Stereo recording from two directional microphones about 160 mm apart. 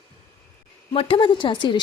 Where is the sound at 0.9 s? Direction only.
35° left (ahead or behind).